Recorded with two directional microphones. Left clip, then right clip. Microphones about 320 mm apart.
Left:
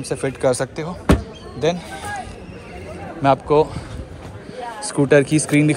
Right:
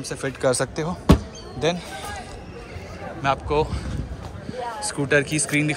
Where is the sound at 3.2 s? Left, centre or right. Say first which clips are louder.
Left 7 dB; centre.